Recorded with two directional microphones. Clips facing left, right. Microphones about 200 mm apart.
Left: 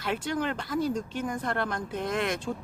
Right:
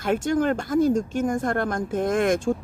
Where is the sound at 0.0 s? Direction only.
45° right (ahead or behind).